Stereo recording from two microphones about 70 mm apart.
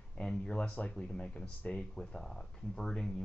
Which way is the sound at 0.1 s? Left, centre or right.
Centre.